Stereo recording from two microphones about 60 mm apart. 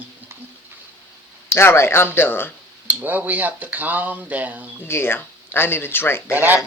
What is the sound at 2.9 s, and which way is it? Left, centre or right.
Speech, right.